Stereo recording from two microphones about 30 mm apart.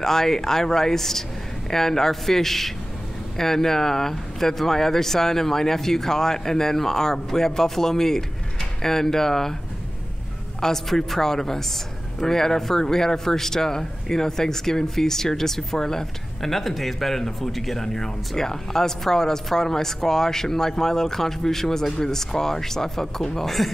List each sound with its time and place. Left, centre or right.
0.0 s a man's voice: centre
10.6 s a man's voice: centre